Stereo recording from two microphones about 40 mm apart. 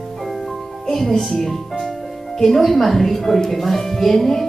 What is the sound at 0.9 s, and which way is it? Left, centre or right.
A woman's voice, centre.